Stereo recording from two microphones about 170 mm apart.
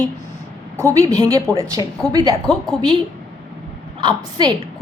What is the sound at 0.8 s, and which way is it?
Speech, 15° right (ahead or behind).